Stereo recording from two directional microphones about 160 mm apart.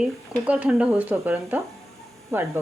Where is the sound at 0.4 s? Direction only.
10° right (ahead or behind).